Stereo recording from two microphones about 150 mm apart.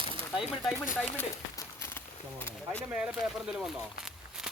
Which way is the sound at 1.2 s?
20° left (ahead or behind).